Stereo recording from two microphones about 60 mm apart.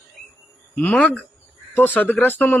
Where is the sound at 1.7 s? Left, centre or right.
Left.